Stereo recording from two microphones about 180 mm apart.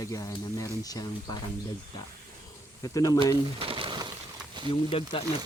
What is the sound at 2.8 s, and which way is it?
Speech, 20° left (ahead or behind).